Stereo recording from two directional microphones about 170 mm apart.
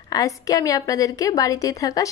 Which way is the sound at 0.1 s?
20° left (ahead or behind).